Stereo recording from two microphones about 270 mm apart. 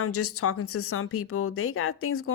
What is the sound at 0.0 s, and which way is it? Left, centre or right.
Speech, left.